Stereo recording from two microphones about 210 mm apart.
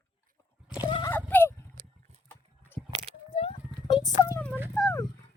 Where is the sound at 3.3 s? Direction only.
30° left (ahead or behind).